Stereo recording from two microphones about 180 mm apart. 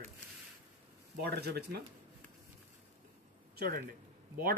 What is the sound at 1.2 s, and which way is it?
Speech, 65° right (ahead or behind).